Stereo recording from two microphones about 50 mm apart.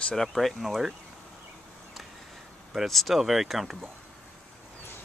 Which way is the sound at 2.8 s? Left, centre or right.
Centre.